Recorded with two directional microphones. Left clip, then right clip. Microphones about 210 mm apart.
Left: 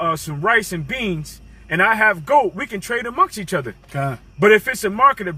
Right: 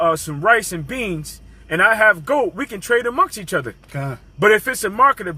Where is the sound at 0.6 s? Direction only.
30° right (ahead or behind).